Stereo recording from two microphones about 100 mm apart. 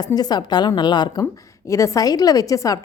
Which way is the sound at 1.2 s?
30° left (ahead or behind).